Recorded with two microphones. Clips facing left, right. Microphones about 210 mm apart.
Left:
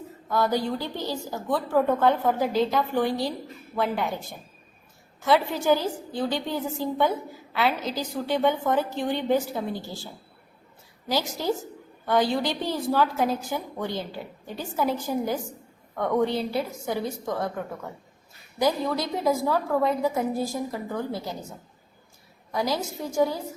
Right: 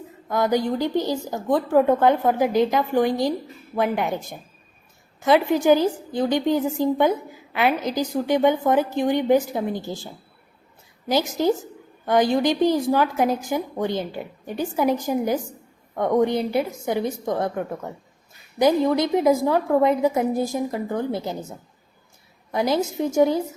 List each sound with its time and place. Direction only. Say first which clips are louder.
0.3 s a woman's voice: right 4 dB; 15° right (ahead or behind)
11.1 s a woman's voice: right 6 dB; 20° right (ahead or behind)
18.6 s a woman's voice: right 6 dB; 20° right (ahead or behind)
22.5 s a woman's voice: right 6 dB; 20° right (ahead or behind)